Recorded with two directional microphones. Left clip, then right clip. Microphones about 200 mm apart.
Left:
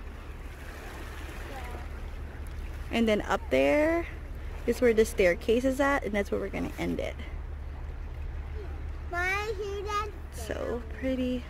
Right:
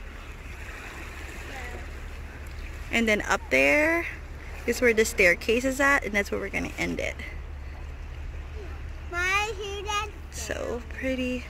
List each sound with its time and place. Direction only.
2.9 s speech: 15° left (ahead or behind)
9.1 s child singing: 30° right (ahead or behind)
10.5 s speech: centre (ahead or behind)